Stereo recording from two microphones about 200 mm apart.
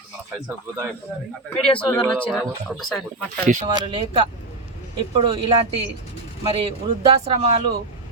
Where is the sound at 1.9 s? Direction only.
5° left (ahead or behind).